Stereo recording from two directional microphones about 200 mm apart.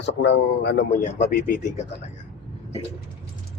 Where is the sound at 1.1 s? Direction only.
40° left (ahead or behind).